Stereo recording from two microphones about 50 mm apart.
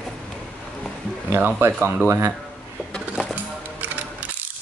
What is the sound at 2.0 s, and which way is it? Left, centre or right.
Speech, right.